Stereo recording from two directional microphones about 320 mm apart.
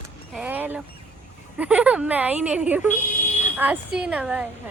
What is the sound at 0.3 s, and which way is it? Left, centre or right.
Speech, centre.